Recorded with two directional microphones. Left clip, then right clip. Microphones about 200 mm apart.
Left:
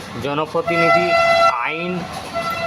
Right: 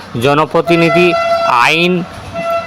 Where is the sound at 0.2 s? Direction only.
40° right (ahead or behind).